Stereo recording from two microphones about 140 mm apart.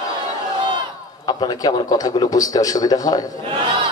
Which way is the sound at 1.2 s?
30° left (ahead or behind).